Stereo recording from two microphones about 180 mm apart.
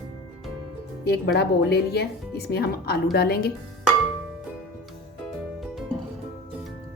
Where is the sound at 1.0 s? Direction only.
65° left (ahead or behind).